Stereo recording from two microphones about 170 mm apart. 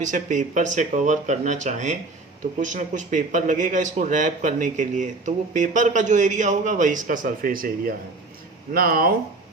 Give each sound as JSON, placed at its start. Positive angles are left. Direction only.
{"t": 0.0, "sound": "a man's voice", "side_deg": -50}